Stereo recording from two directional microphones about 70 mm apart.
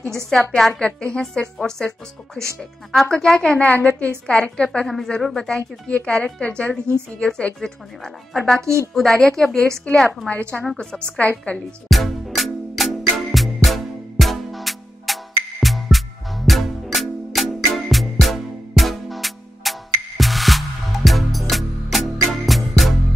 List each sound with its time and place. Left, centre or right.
0.0 s speech: centre
3.5 s a woman's voice: left
10.0 s a woman's voice: left
10.8 s a woman's voice: centre
11.5 s music: centre